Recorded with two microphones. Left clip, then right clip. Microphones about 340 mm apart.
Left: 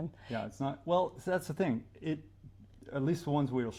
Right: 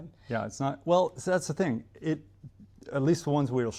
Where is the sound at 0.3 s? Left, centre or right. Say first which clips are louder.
Right 6 dB; right.